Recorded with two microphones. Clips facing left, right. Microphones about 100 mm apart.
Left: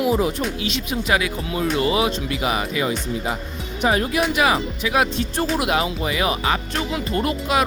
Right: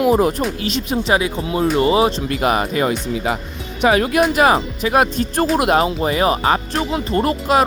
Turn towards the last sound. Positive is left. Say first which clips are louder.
# right 5 dB
turn(degrees=-40)  # may be behind; listen again after turning